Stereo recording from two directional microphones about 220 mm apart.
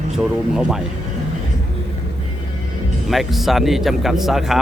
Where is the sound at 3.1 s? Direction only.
Centre (ahead or behind).